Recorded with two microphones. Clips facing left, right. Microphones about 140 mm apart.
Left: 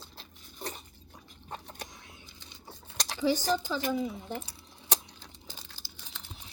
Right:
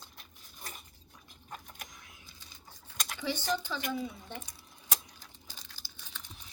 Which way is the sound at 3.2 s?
40° left (ahead or behind).